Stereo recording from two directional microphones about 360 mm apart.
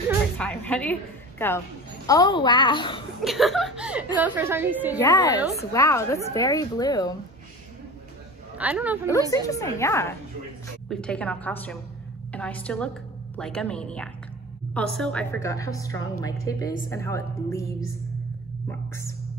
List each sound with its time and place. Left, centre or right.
0.4 s a woman's voice: centre
3.2 s a woman's voice: centre
5.0 s a woman's voice: centre
8.5 s a woman's voice: centre
9.3 s a woman's voice: centre